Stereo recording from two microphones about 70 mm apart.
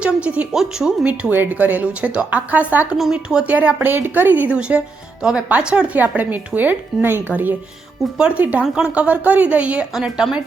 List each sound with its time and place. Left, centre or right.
0.0 s a sound: centre
0.5 s a woman's voice: centre
1.0 s a woman's voice: centre
3.0 s a woman's voice: centre
3.4 s a woman's voice: right
9.9 s a woman's voice: centre